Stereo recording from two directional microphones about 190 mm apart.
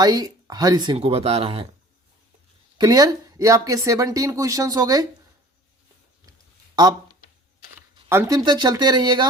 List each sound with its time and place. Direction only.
0.0 s speech: 20° right (ahead or behind)
2.7 s speech: 20° right (ahead or behind)
8.1 s speech: 15° right (ahead or behind)